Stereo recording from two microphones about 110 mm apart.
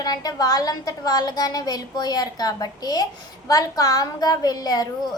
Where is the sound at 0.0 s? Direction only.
35° left (ahead or behind).